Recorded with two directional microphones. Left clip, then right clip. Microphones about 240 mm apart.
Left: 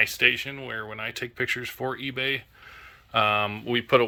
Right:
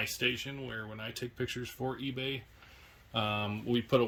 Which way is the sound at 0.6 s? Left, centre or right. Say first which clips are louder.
Left 8 dB; left.